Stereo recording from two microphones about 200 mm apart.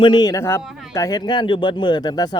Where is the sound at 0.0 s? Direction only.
20° left (ahead or behind).